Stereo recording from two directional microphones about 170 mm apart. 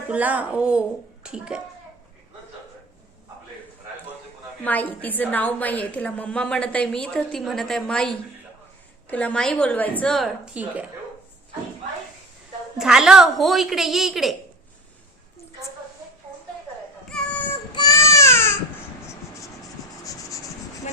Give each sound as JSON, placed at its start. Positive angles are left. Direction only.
{"t": 0.1, "sound": "speech", "side_deg": -10}
{"t": 4.6, "sound": "a woman's voice", "side_deg": 10}
{"t": 12.7, "sound": "a woman's voice", "side_deg": -5}
{"t": 17.1, "sound": "a sound", "side_deg": 5}
{"t": 17.7, "sound": "baby cry", "side_deg": 20}
{"t": 19.0, "sound": "writing", "side_deg": 15}